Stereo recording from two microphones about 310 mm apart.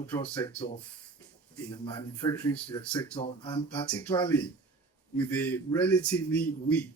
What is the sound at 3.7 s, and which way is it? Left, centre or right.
Speech, centre.